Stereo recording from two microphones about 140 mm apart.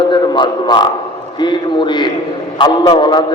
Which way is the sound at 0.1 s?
35° left (ahead or behind).